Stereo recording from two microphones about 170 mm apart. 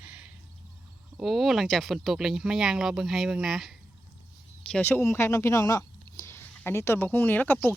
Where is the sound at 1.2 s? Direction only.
Centre (ahead or behind).